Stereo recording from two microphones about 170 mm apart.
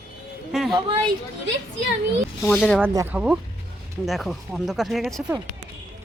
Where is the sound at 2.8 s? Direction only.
15° right (ahead or behind).